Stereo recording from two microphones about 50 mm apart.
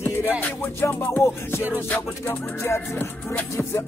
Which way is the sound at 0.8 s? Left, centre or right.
Left.